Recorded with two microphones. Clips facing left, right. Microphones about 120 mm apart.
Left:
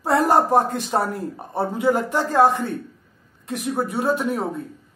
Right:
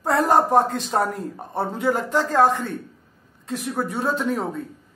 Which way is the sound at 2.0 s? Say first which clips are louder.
Right 1 dB; 55° left (ahead or behind).